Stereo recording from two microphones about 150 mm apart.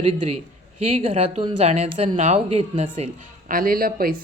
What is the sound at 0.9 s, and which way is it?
Speech, 40° right (ahead or behind).